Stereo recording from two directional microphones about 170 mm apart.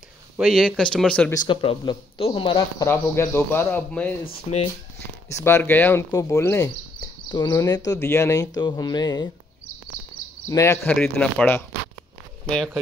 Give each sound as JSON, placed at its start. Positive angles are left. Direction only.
{"t": 0.4, "sound": "speech", "side_deg": 0}
{"t": 1.3, "sound": "speech", "side_deg": 25}
{"t": 2.9, "sound": "speech", "side_deg": 15}
{"t": 4.5, "sound": "speech", "side_deg": 35}
{"t": 5.4, "sound": "speech", "side_deg": 10}
{"t": 7.2, "sound": "speech", "side_deg": 25}
{"t": 10.5, "sound": "speech", "side_deg": 15}
{"t": 10.9, "sound": "speech", "side_deg": 5}